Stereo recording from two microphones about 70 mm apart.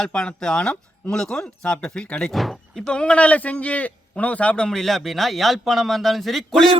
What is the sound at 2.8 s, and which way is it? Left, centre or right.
Speech, centre.